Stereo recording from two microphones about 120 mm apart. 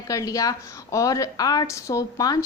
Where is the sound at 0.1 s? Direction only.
30° left (ahead or behind).